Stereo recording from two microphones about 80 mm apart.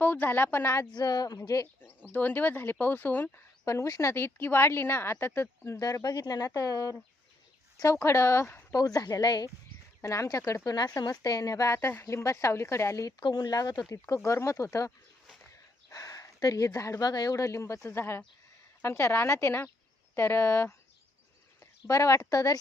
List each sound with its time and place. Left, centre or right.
0.0 s speech: left
0.9 s speech: left
2.0 s speech: left
3.7 s speech: left
4.1 s speech: left
5.8 s speech: left
8.7 s speech: left
10.0 s speech: left
12.0 s speech: left
13.1 s speech: left
14.3 s speech: left
15.9 s a sound: left
17.0 s speech: left
17.3 s speech: left